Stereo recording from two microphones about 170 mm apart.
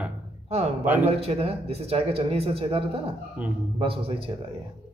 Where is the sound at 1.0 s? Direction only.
35° right (ahead or behind).